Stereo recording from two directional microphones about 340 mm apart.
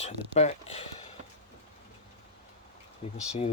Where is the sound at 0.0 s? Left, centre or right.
Centre.